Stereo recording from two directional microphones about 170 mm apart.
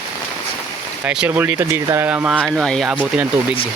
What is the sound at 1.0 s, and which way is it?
Speech, 5° right (ahead or behind).